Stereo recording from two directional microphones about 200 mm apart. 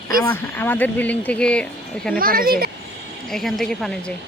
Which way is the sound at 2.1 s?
45° right (ahead or behind).